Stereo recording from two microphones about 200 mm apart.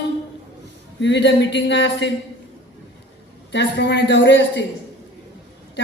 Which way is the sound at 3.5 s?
60° left (ahead or behind).